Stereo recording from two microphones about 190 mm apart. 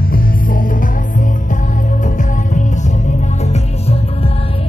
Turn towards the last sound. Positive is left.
turn(degrees=35)  # may be behind; listen again after turning